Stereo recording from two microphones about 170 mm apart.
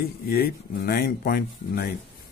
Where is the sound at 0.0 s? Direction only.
65° left (ahead or behind).